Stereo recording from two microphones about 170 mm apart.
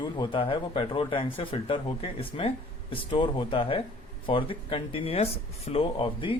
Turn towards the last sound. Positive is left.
turn(degrees=30)  # may be behind; listen again after turning